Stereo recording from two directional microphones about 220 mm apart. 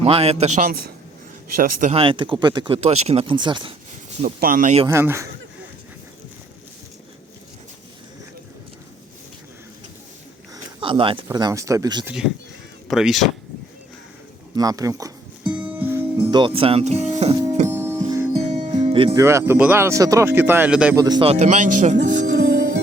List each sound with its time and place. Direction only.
0.0 s speech: 25° right (ahead or behind)
1.5 s speech: 30° right (ahead or behind)
4.2 s speech: 40° right (ahead or behind)
4.9 s speech: 10° right (ahead or behind)
10.5 s a sound: 20° right (ahead or behind)
11.3 s speech: 15° right (ahead or behind)
12.9 s speech: centre (ahead or behind)
14.5 s speech: 15° right (ahead or behind)
15.4 s music: 5° right (ahead or behind)
16.1 s speech: 20° right (ahead or behind)
17.7 s music: 15° right (ahead or behind)
18.7 s speech: 20° right (ahead or behind); by 20.9 s 5° right (ahead or behind)
20.9 s speech: 15° right (ahead or behind)
21.9 s music: 50° right (ahead or behind)